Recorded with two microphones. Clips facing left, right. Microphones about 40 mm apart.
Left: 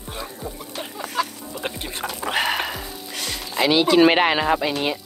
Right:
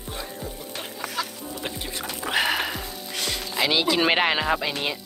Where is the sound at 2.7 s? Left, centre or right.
Centre.